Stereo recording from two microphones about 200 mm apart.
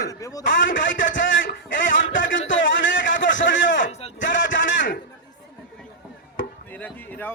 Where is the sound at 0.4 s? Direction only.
65° left (ahead or behind).